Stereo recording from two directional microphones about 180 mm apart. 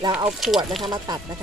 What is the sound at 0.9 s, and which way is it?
Speech, 20° right (ahead or behind).